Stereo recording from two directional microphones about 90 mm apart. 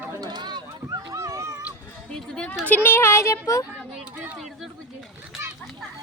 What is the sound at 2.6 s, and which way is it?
Speech, 20° left (ahead or behind).